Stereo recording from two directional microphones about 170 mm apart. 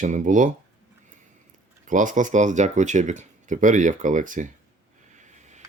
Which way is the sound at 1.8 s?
50° right (ahead or behind).